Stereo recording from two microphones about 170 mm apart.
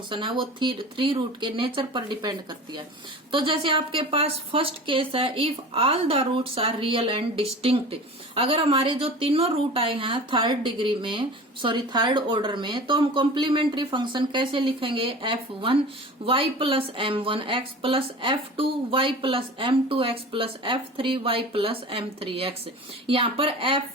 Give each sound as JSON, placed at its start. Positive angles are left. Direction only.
{"t": 0.1, "sound": "a woman's voice", "side_deg": -30}